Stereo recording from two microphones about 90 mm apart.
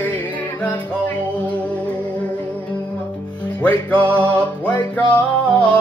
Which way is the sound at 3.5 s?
15° left (ahead or behind).